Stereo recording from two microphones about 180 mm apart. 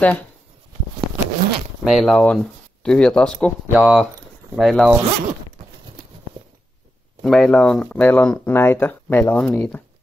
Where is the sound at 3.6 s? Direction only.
5° right (ahead or behind).